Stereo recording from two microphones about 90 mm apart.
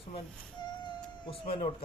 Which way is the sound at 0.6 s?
60° left (ahead or behind).